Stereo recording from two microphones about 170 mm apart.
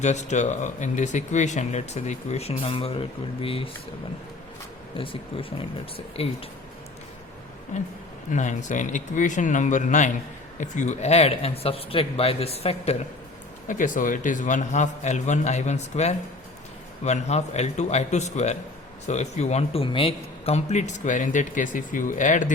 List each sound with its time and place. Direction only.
0.0 s speech: 45° left (ahead or behind)
4.9 s speech: 30° left (ahead or behind)
7.7 s speech: 45° left (ahead or behind)
13.7 s speech: 50° left (ahead or behind)